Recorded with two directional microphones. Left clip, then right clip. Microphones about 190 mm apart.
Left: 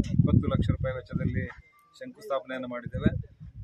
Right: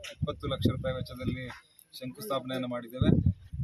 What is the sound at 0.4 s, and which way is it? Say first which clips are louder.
Speech: left 1 dB; 5° left (ahead or behind).